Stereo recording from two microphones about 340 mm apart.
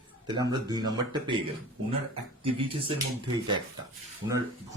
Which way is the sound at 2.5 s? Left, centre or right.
Centre.